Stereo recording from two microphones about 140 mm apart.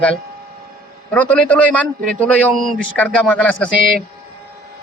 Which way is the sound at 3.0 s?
10° left (ahead or behind).